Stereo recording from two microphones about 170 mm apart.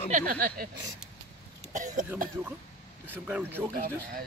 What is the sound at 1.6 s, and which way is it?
Cough, 50° right (ahead or behind).